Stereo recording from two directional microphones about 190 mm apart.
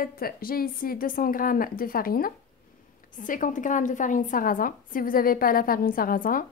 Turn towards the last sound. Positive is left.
turn(degrees=45)  # may be behind; listen again after turning